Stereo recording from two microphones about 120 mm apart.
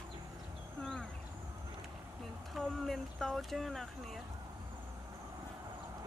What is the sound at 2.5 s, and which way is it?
Speech, centre (ahead or behind).